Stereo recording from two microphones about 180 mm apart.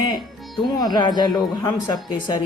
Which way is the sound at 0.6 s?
25° left (ahead or behind).